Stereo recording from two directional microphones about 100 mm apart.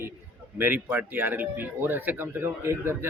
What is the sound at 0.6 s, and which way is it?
Speech, 20° right (ahead or behind).